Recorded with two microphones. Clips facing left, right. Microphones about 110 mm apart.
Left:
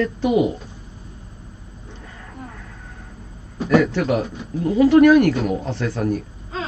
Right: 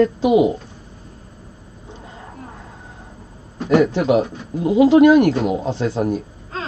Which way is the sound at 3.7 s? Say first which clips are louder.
Right 3 dB; 20° right (ahead or behind).